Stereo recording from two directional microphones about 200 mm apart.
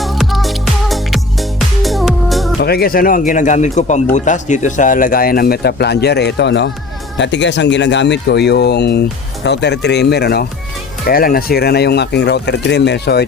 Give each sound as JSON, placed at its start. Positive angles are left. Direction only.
{"t": 0.0, "sound": "music", "side_deg": 0}
{"t": 2.6, "sound": "speech", "side_deg": 50}